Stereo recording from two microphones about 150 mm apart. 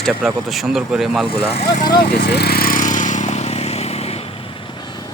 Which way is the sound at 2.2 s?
90° left.